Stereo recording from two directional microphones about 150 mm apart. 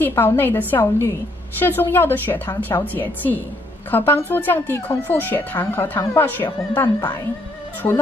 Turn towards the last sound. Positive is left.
turn(degrees=15)  # may be behind; listen again after turning